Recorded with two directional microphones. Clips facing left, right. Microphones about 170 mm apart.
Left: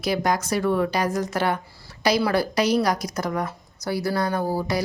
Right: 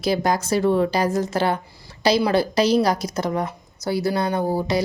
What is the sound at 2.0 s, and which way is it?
A woman's voice, 25° right (ahead or behind).